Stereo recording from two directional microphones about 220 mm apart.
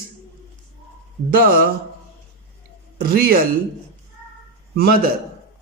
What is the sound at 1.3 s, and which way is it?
Speech, 40° right (ahead or behind).